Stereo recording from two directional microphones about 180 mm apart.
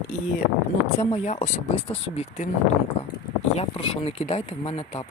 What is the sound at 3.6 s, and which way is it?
Speech, 35° left (ahead or behind).